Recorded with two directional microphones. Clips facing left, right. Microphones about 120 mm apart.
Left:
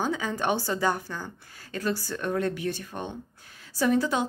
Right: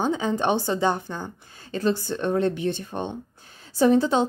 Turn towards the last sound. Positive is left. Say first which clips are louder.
# right 5 dB
turn(degrees=-30)  # may be behind; listen again after turning